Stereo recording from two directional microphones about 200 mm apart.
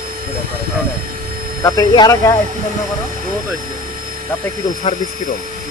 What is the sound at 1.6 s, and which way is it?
Speech, 20° left (ahead or behind).